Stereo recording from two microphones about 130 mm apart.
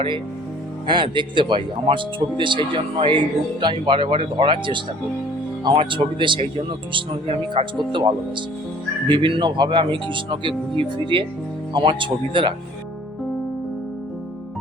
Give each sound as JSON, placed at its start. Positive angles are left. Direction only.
{"t": 0.9, "sound": "speech", "side_deg": -35}